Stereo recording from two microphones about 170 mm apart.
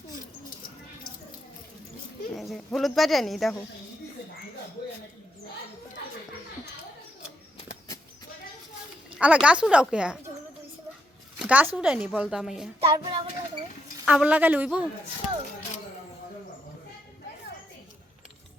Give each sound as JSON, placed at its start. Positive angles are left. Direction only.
{"t": 2.3, "sound": "speech", "side_deg": 0}
{"t": 9.1, "sound": "speech", "side_deg": -5}
{"t": 11.3, "sound": "speech", "side_deg": -10}
{"t": 12.8, "sound": "speech", "side_deg": -30}
{"t": 14.0, "sound": "a woman's voice", "side_deg": -5}